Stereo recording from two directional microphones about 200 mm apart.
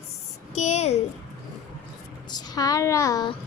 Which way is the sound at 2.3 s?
20° left (ahead or behind).